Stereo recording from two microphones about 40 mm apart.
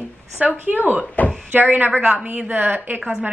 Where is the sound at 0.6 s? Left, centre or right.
Right.